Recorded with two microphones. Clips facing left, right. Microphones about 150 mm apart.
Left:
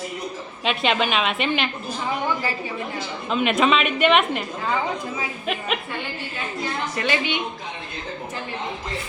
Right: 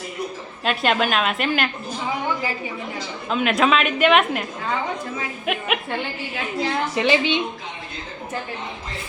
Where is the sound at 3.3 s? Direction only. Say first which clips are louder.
Even; centre (ahead or behind).